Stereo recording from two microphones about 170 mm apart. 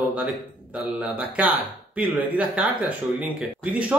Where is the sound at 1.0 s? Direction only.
10° right (ahead or behind).